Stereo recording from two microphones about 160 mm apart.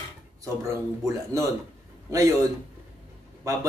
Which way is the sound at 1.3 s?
20° right (ahead or behind).